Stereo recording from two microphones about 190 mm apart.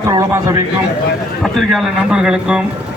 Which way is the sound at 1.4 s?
Centre (ahead or behind).